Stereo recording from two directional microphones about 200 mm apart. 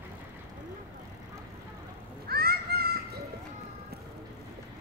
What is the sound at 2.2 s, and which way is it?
Goose, 50° right (ahead or behind).